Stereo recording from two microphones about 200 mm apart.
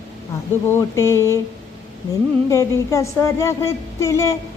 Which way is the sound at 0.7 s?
15° left (ahead or behind).